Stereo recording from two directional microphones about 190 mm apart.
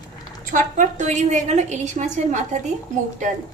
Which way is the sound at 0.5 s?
40° right (ahead or behind).